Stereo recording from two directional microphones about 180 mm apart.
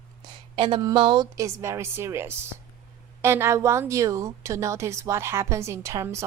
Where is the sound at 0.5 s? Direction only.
25° right (ahead or behind).